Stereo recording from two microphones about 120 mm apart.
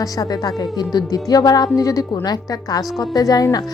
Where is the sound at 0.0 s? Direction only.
30° left (ahead or behind).